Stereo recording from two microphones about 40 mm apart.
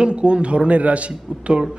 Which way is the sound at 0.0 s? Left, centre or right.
Right.